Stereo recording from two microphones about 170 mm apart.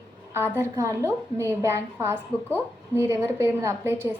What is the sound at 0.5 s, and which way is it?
A woman's voice, 15° right (ahead or behind).